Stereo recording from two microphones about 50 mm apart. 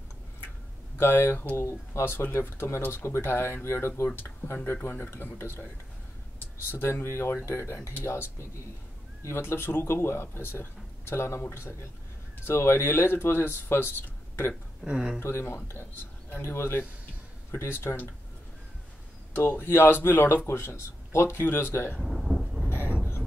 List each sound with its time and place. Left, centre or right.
0.9 s speech: left
1.6 s speech: left
2.0 s speech: left
4.4 s speech: left
6.7 s speech: left
8.0 s speech: left
9.3 s speech: left
14.9 s speech: centre
15.1 s speech: left
19.5 s speech: left
22.0 s thunder: centre
22.7 s vehicle: left